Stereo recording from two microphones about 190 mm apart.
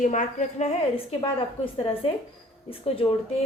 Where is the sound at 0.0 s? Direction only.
40° left (ahead or behind).